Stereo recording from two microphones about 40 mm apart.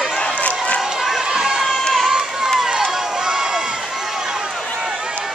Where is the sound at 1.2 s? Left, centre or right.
Centre.